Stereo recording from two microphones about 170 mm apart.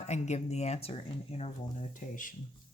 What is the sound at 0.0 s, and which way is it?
Speech, 40° left (ahead or behind).